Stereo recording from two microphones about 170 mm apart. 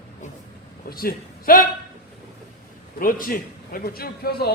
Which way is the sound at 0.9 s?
60° left (ahead or behind).